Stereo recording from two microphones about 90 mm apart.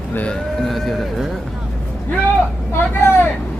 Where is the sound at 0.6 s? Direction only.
Centre (ahead or behind).